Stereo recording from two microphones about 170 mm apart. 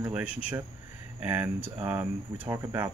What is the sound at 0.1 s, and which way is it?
Speech, 10° right (ahead or behind).